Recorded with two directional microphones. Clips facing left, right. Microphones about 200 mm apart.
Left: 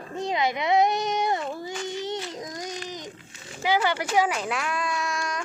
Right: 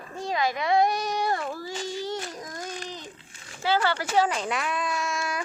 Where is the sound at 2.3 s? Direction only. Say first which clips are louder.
Left 2 dB; 20° left (ahead or behind).